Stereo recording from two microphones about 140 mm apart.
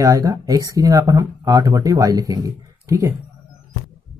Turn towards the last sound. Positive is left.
turn(degrees=-20)  # may be behind; listen again after turning